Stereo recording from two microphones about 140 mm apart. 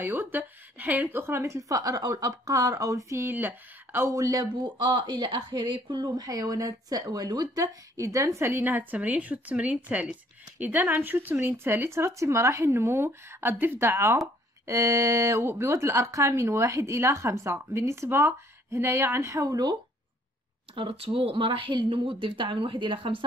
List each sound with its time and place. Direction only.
0.0 s a woman's voice: 15° right (ahead or behind)
20.7 s speech: 40° right (ahead or behind)